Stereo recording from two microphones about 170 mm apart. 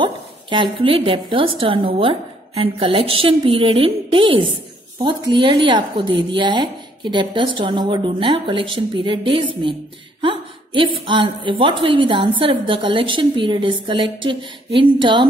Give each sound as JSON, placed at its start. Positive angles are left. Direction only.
{"t": 0.0, "sound": "a woman's voice", "side_deg": -30}